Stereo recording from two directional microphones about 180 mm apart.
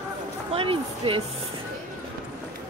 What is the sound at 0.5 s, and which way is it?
Speech, 30° right (ahead or behind).